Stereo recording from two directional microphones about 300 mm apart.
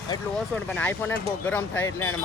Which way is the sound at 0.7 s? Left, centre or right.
Centre.